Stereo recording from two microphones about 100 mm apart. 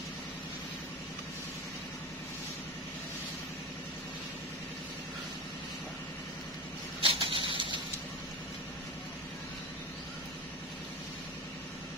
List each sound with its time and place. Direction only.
7.0 s vehicle: 65° right (ahead or behind)